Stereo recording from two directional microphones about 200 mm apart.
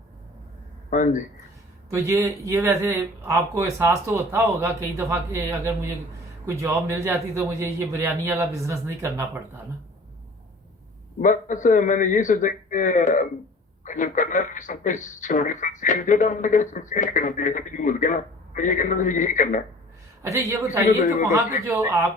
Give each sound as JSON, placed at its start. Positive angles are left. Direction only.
{"t": 0.9, "sound": "a sound", "side_deg": 40}
{"t": 1.9, "sound": "speech", "side_deg": -15}
{"t": 11.2, "sound": "speech", "side_deg": 40}
{"t": 20.2, "sound": "speech", "side_deg": -15}